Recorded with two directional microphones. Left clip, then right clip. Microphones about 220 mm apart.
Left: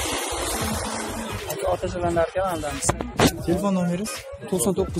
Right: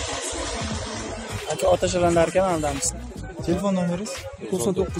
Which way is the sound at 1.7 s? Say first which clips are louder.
Right 6 dB; 45° right (ahead or behind).